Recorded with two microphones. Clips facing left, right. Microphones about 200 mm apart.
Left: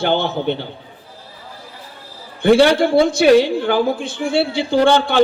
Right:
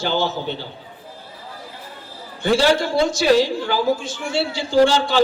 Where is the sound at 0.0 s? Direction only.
60° left (ahead or behind).